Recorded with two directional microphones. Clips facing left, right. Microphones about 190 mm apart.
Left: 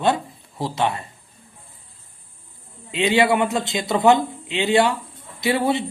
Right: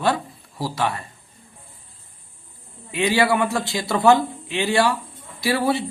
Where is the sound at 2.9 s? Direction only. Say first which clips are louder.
Left 1 dB; 20° left (ahead or behind).